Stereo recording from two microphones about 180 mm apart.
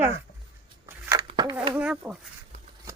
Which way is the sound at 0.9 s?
10° right (ahead or behind).